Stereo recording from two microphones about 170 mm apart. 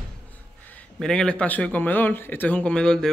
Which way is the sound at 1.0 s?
5° left (ahead or behind).